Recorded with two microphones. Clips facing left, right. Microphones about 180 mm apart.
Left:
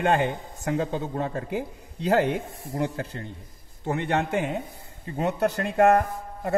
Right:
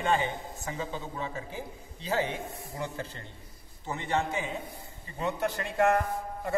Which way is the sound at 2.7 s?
65° left (ahead or behind).